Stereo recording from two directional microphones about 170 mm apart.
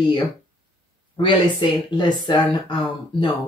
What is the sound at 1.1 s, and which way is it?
Speech, 30° left (ahead or behind).